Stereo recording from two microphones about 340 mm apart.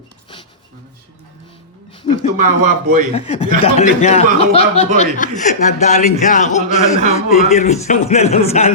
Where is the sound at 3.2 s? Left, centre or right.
Centre.